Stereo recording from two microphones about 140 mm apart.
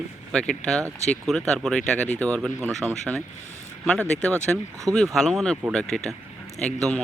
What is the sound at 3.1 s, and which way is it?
Speech, 5° right (ahead or behind).